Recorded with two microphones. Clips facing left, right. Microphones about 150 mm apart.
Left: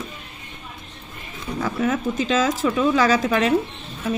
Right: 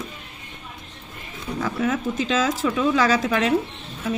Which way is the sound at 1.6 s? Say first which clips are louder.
Left 1 dB; 40° left (ahead or behind).